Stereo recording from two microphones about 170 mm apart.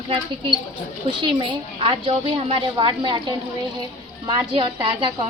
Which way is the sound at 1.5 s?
30° right (ahead or behind).